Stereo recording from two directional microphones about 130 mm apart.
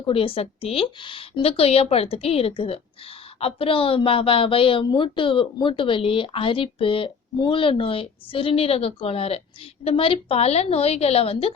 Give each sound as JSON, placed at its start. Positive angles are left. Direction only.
{"t": 0.0, "sound": "speech", "side_deg": 45}